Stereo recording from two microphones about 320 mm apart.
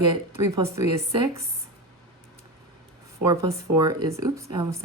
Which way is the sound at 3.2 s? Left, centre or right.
Centre.